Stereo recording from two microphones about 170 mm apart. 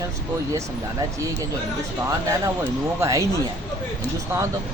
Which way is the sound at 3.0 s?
15° right (ahead or behind).